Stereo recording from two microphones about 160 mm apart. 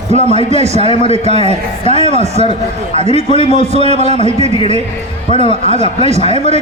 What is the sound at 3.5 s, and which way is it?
Speech, 45° right (ahead or behind).